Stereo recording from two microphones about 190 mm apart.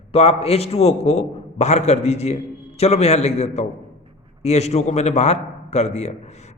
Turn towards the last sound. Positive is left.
turn(degrees=35)  # may be behind; listen again after turning